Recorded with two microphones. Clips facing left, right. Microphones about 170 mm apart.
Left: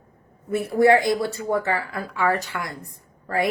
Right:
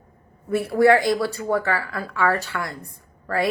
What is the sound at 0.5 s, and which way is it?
A woman's voice, 20° left (ahead or behind).